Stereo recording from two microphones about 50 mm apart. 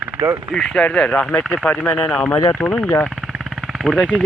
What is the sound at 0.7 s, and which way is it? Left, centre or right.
Speech, left.